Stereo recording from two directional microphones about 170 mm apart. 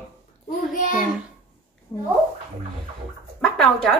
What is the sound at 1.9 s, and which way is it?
Speech, 15° left (ahead or behind).